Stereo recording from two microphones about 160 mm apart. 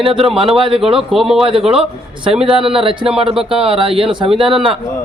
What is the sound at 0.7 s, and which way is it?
A man's voice, centre (ahead or behind).